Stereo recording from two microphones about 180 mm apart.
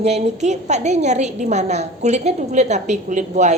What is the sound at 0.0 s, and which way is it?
A woman's voice, 40° right (ahead or behind).